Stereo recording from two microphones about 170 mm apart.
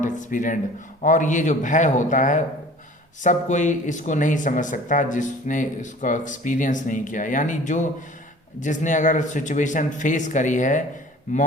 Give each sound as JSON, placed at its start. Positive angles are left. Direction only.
{"t": 0.0, "sound": "speech", "side_deg": 50}